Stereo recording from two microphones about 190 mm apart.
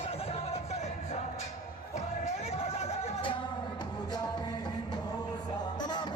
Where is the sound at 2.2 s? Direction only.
35° left (ahead or behind).